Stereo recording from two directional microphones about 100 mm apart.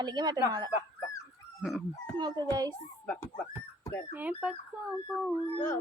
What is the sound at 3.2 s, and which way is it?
Speech, 30° left (ahead or behind).